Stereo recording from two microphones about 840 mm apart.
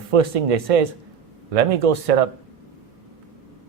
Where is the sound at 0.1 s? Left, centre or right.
Right.